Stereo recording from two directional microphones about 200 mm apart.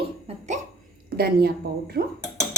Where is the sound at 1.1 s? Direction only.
50° right (ahead or behind).